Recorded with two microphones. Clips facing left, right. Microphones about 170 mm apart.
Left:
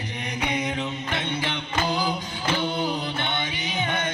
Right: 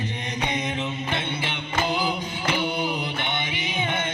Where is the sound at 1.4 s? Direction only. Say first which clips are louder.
Even; 20° right (ahead or behind).